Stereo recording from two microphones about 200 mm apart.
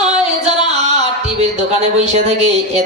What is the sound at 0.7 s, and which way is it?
Speech, 35° right (ahead or behind).